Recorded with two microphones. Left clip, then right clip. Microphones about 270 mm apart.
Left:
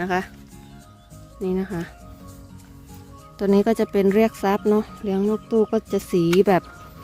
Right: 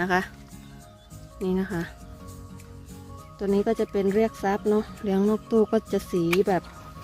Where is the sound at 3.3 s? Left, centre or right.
Left.